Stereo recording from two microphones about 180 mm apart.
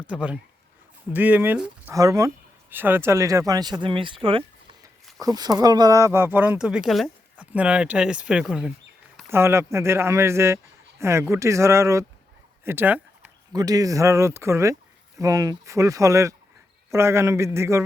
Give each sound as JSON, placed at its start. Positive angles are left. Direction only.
{"t": 0.1, "sound": "speech", "side_deg": -5}
{"t": 9.3, "sound": "speech", "side_deg": -15}